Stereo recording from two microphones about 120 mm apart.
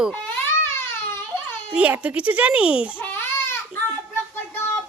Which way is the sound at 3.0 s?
15° left (ahead or behind).